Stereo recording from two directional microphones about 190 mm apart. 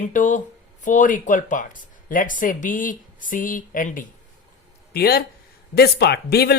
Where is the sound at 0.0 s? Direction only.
40° left (ahead or behind).